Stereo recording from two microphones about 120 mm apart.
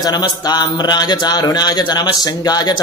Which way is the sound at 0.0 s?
35° left (ahead or behind).